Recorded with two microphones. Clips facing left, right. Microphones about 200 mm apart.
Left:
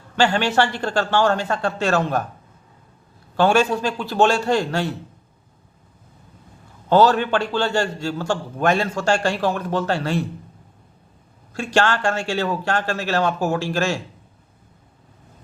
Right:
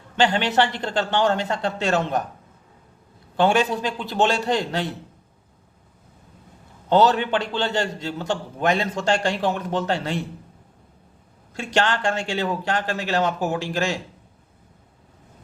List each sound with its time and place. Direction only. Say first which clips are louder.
0.2 s a man's voice: left 1 dB; 20° right (ahead or behind)
3.3 s a man's voice: left 2 dB; 20° right (ahead or behind)
6.9 s a man's voice: left 2 dB; 20° right (ahead or behind)
11.5 s a man's voice: left 3 dB; 20° right (ahead or behind)